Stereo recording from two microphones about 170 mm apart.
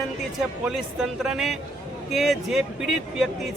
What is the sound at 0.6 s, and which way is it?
Speech, centre (ahead or behind).